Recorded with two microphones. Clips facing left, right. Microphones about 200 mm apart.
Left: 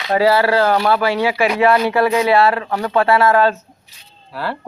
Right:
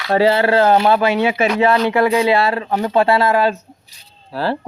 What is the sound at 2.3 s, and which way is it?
Speech, 20° right (ahead or behind).